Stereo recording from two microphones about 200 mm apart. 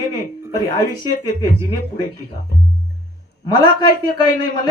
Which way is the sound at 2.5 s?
50° left (ahead or behind).